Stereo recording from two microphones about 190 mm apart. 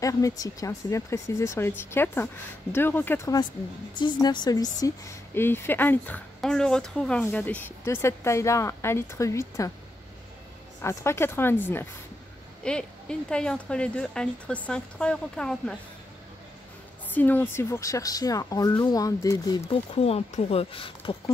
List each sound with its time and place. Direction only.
0.0 s speech: 20° left (ahead or behind)
3.9 s speech: 25° left (ahead or behind)
10.8 s speech: 15° left (ahead or behind)
17.1 s speech: 10° left (ahead or behind); by 21.2 s 30° left (ahead or behind)